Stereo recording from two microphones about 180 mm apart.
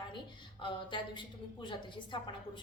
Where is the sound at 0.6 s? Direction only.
25° left (ahead or behind).